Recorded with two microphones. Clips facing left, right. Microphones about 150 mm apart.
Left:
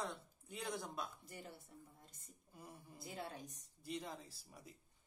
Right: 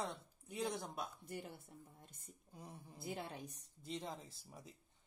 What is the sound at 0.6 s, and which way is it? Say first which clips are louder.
Speech: right 3 dB; 25° right (ahead or behind).